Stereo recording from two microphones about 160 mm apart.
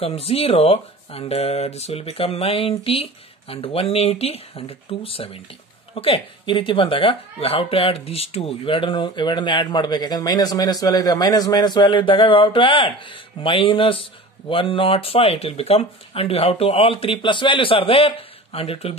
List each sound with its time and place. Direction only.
0.0 s a man's voice: 35° left (ahead or behind)